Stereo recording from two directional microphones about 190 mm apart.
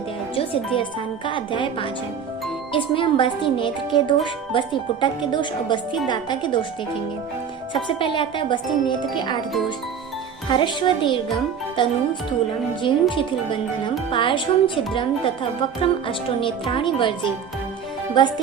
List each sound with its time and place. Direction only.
0.3 s speech: 25° left (ahead or behind)
7.7 s speech: 25° left (ahead or behind)
10.5 s speech: 25° left (ahead or behind)